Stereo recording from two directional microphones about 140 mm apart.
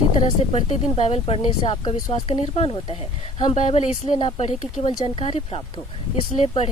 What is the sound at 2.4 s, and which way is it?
Speech, 50° left (ahead or behind).